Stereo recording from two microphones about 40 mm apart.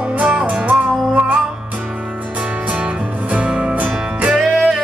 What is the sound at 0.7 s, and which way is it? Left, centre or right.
Music, right.